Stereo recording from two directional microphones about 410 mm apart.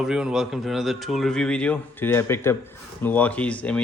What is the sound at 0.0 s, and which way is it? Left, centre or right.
Speech, centre.